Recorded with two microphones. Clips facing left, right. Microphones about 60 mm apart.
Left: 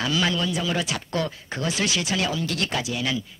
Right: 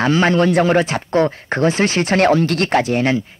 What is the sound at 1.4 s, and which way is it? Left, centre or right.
Speech, right.